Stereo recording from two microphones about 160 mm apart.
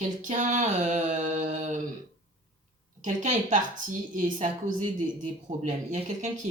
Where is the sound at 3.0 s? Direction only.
50° right (ahead or behind).